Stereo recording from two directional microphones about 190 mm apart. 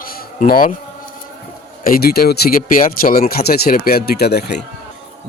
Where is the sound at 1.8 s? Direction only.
50° left (ahead or behind).